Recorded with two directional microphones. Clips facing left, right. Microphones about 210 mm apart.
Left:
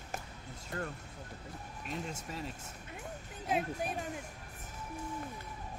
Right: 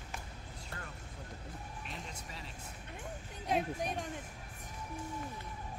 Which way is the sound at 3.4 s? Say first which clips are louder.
Even; 5° left (ahead or behind).